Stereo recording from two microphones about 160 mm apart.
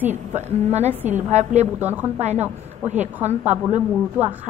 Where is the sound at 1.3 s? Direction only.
45° right (ahead or behind).